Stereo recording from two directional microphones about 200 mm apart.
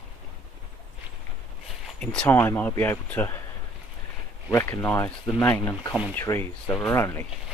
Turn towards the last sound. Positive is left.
turn(degrees=15)  # may be behind; listen again after turning